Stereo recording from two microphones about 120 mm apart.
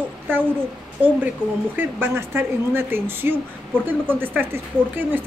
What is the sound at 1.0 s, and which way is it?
Speech, 15° right (ahead or behind).